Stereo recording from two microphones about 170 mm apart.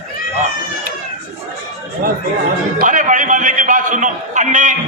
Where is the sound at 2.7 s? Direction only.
50° right (ahead or behind).